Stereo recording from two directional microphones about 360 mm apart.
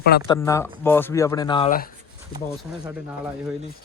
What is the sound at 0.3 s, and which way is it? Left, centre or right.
Speech, centre.